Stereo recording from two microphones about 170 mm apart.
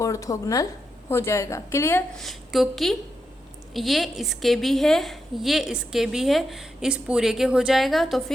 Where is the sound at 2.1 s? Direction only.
Centre (ahead or behind).